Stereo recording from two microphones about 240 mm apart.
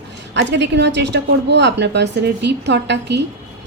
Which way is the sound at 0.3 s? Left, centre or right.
Right.